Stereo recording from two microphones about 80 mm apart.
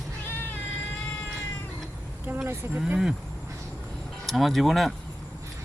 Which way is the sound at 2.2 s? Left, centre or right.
Right.